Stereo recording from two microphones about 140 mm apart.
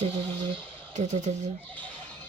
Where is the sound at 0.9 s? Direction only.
60° right (ahead or behind).